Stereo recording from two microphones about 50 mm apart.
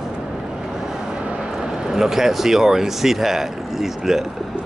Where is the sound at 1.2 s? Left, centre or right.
Right.